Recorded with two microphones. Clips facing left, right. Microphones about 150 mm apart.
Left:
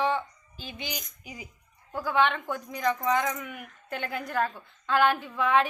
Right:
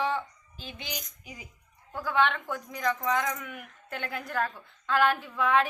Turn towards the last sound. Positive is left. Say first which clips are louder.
# left 1 dB
turn(degrees=0)  # may be behind; listen again after turning